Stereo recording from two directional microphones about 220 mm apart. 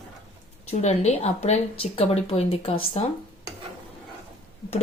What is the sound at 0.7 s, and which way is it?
Speech, 30° left (ahead or behind).